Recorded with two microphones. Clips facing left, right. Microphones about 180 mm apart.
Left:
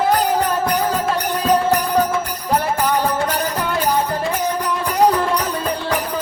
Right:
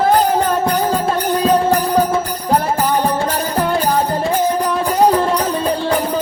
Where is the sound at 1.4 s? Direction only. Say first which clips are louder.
Right 2 dB; 30° right (ahead or behind).